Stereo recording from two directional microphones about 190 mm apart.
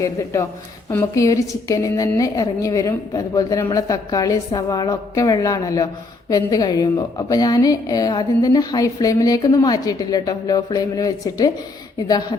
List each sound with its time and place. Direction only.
0.9 s a woman's voice: 15° left (ahead or behind)